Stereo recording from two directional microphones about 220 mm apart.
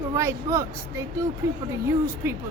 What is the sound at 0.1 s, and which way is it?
Speech, 15° right (ahead or behind).